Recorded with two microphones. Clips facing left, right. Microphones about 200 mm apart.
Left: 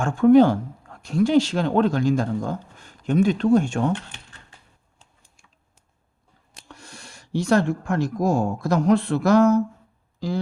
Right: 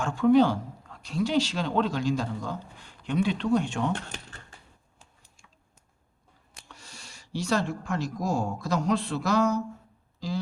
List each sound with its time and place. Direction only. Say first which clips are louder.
0.0 s speech: left 6 dB; 50° left (ahead or behind)
6.7 s speech: left 6 dB; 50° left (ahead or behind)